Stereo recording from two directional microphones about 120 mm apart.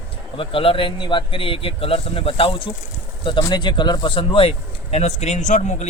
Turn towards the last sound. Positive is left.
turn(degrees=80)